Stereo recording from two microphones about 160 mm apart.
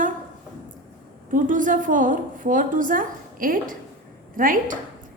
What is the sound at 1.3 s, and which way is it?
A woman's voice, 55° right (ahead or behind).